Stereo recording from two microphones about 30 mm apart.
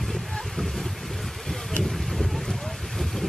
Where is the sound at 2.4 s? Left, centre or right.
Centre.